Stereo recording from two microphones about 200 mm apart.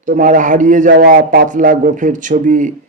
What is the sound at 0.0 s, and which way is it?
Speech, 40° right (ahead or behind).